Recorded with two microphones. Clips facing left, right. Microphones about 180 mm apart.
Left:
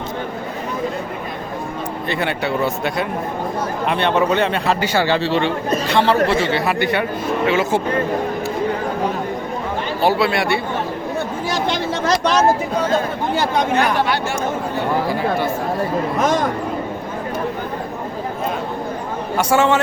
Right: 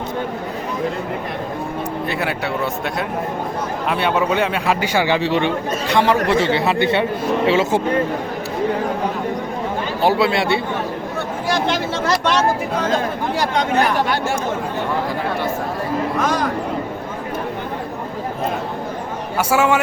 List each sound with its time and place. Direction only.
2.0 s a man's voice: 5° right (ahead or behind); by 7.7 s 30° right (ahead or behind)
10.0 s speech: 20° right (ahead or behind)
13.3 s speech: 5° left (ahead or behind)
19.4 s a man's voice: 5° right (ahead or behind)